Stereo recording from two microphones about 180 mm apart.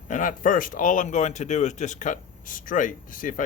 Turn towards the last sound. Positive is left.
turn(degrees=45)  # may be behind; listen again after turning